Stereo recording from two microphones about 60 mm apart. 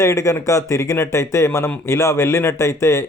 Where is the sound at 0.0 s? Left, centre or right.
Left.